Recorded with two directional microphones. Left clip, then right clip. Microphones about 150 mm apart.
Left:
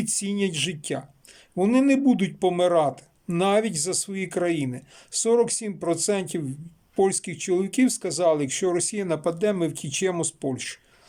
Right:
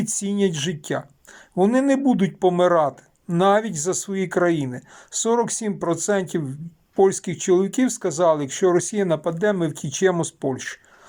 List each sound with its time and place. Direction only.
0.0 s speech: 10° left (ahead or behind)